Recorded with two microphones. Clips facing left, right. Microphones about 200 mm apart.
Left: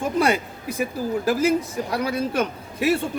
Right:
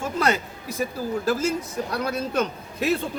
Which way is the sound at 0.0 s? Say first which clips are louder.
Left 3 dB; 15° left (ahead or behind).